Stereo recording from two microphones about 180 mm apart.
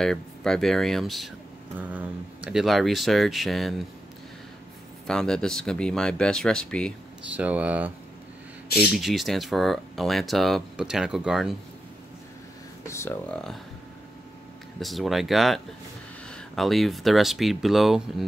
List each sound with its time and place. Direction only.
0.0 s speech: 5° left (ahead or behind)
5.0 s speech: 5° left (ahead or behind)
7.2 s speech: 10° right (ahead or behind)
12.8 s a sound: 15° left (ahead or behind)
14.8 s speech: centre (ahead or behind)